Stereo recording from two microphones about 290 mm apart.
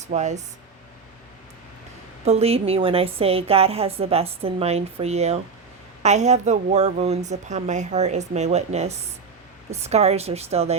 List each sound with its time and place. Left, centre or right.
0.0 s speech: right
2.2 s a woman's voice: right